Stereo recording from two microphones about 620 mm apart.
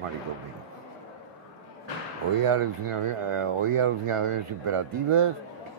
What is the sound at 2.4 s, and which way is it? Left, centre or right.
Speech, right.